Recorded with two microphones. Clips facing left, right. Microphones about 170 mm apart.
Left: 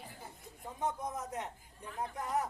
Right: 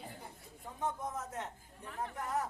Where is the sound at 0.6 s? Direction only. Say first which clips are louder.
Left 1 dB; 15° left (ahead or behind).